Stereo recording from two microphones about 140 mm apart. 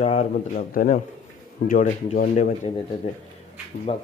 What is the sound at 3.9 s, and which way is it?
Speech, 40° left (ahead or behind).